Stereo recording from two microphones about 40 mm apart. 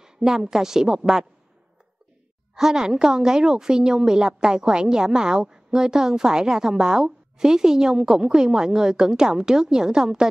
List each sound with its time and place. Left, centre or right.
0.0 s a woman's voice: centre
2.5 s a woman's voice: centre